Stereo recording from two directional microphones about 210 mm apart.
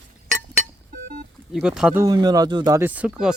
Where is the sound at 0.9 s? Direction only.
40° right (ahead or behind).